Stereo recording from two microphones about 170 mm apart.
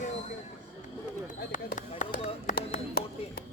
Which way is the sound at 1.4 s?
50° left (ahead or behind).